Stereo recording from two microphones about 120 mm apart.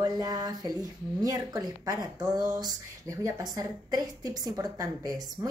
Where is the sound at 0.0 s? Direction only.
35° right (ahead or behind).